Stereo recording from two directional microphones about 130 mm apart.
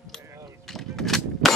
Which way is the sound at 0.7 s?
Centre (ahead or behind).